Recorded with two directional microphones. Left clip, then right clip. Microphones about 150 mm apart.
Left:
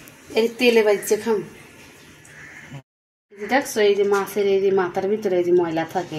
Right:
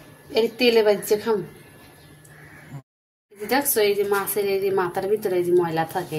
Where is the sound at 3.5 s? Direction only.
20° left (ahead or behind).